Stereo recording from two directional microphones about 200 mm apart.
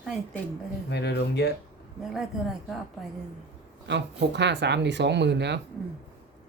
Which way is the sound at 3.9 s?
60° right (ahead or behind).